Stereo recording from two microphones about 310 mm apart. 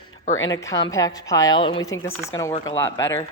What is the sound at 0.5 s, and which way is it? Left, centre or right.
A woman's voice, centre.